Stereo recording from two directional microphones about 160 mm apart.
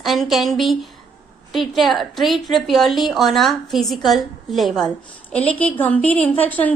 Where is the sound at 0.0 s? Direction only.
Centre (ahead or behind).